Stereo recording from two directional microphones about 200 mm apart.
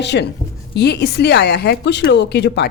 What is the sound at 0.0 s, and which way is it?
Speech, 60° left (ahead or behind).